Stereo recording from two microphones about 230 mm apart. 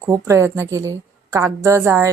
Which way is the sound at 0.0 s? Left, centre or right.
Centre.